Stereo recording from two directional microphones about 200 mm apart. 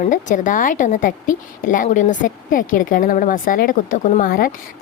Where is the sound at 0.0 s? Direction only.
40° left (ahead or behind).